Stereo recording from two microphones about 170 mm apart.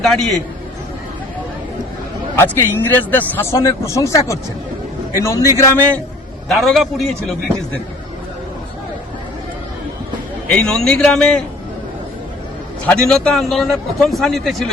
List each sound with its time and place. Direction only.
0.0 s a man's voice: centre (ahead or behind)
2.4 s a man's voice: 15° left (ahead or behind)
10.5 s a man's voice: 5° left (ahead or behind)
12.8 s a man's voice: 5° left (ahead or behind)